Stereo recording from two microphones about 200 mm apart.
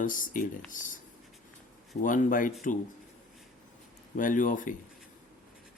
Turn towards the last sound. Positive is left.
turn(degrees=40)  # may be behind; listen again after turning